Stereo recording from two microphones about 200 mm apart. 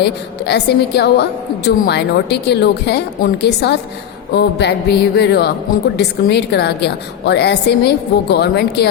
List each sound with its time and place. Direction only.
0.0 s a woman's voice: 55° left (ahead or behind)